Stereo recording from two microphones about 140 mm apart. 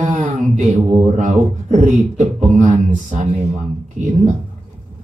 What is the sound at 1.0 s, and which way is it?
A man's voice, 60° right (ahead or behind).